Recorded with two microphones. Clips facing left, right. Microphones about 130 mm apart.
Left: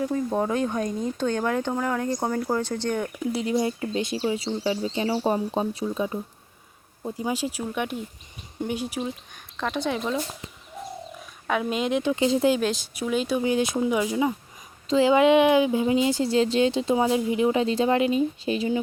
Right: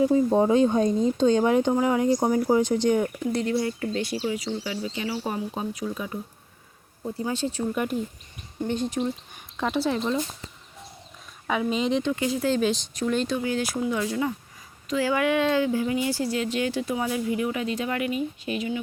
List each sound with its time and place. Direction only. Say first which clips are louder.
0.0 s speech: right 5 dB; 15° right (ahead or behind)
3.3 s speech: left 2 dB; 15° left (ahead or behind)
7.7 s speech: right 2 dB; centre (ahead or behind)
9.6 s speech: right 2 dB; 5° right (ahead or behind)
10.0 s speech: right 1 dB; 10° left (ahead or behind)
11.4 s speech: even; centre (ahead or behind)
12.1 s speech: left 4 dB; 20° left (ahead or behind)
12.5 s speech: right 2 dB; centre (ahead or behind)
13.4 s speech: left 3 dB; 20° left (ahead or behind)